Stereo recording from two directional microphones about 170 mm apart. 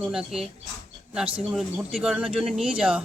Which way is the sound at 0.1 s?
5° right (ahead or behind).